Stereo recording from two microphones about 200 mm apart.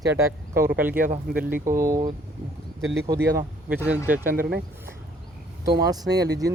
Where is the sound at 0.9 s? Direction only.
45° right (ahead or behind).